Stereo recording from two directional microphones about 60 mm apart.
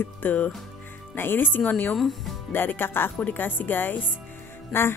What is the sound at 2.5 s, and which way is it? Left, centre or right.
A woman's voice, left.